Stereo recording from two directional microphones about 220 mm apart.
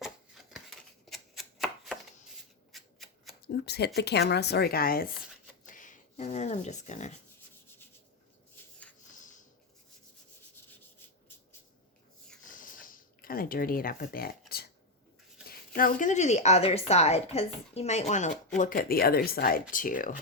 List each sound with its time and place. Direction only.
0.5 s chopping: centre (ahead or behind)
2.7 s shuffling cards: centre (ahead or behind)
3.4 s speech: 50° left (ahead or behind); by 7.2 s 30° left (ahead or behind)
12.5 s a sound: 40° left (ahead or behind)
15.4 s speech: 40° left (ahead or behind)